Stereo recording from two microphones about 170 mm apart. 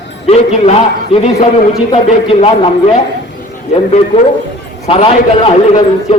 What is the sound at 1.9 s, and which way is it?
Speech, 35° left (ahead or behind).